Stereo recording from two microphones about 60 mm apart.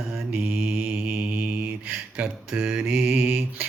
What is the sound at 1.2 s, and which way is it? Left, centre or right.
Mantra, right.